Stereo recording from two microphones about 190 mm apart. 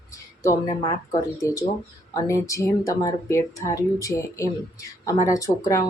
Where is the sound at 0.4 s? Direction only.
20° left (ahead or behind).